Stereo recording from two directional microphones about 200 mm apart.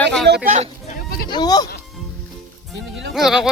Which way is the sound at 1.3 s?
20° left (ahead or behind).